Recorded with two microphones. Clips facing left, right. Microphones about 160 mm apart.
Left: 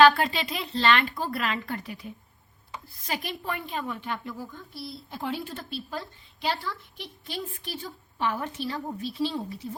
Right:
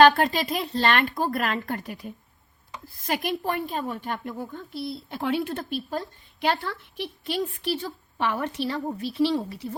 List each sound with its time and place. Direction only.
0.0 s a woman's voice: 45° right (ahead or behind); by 9.6 s 70° right (ahead or behind)